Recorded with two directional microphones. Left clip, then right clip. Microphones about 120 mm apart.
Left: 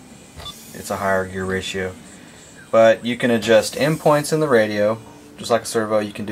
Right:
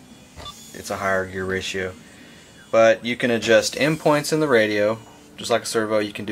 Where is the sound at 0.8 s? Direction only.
15° right (ahead or behind).